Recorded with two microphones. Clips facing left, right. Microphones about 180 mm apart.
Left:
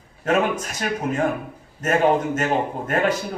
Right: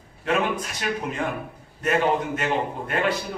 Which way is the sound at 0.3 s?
45° left (ahead or behind).